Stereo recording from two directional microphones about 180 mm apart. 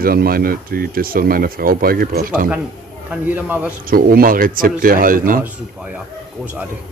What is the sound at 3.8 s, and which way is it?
Speech, 55° right (ahead or behind).